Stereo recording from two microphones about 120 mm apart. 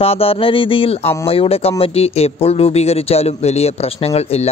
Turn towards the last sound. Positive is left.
turn(degrees=60)  # may be behind; listen again after turning